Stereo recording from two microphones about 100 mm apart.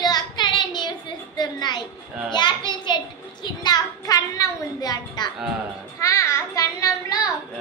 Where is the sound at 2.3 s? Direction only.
50° left (ahead or behind).